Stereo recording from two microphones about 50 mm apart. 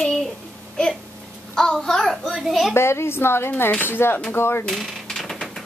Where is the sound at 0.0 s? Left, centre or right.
Centre.